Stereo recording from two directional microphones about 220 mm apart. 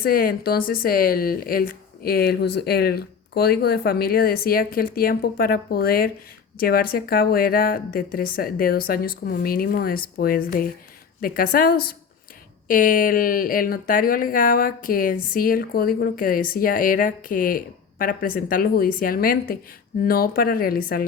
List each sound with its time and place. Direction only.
0.0 s speech: 40° left (ahead or behind)